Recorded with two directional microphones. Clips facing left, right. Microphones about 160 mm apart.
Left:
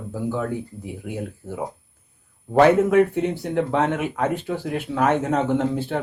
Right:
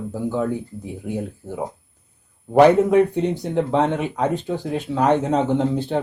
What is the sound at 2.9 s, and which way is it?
Speech, 5° left (ahead or behind).